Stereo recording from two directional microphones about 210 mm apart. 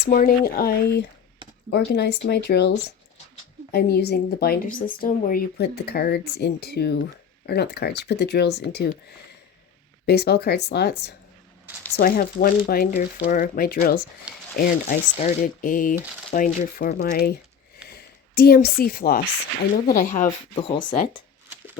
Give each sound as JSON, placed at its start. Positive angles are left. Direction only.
{"t": 0.0, "sound": "speech", "side_deg": 45}
{"t": 10.1, "sound": "speech", "side_deg": 50}
{"t": 20.6, "sound": "speech", "side_deg": 20}